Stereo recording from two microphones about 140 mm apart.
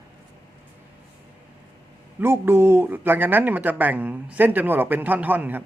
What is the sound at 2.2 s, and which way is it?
A man's voice, 15° right (ahead or behind).